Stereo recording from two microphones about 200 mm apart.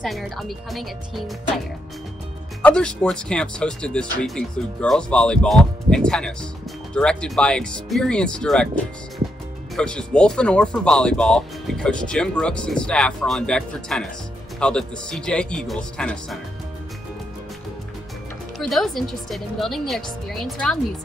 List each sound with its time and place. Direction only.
0.0 s speech: centre (ahead or behind)
2.6 s speech: 5° left (ahead or behind)
9.8 s speech: 5° left (ahead or behind)
18.6 s speech: centre (ahead or behind)